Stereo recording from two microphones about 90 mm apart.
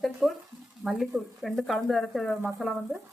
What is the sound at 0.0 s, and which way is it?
Speech, centre (ahead or behind).